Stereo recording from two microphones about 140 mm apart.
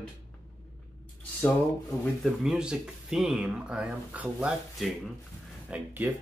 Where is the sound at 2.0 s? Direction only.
Centre (ahead or behind).